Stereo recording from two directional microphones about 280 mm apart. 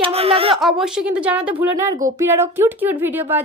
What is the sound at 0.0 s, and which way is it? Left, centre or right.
Speech, right.